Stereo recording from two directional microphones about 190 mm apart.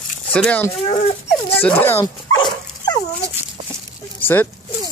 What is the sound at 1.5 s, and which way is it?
Dog, 10° left (ahead or behind).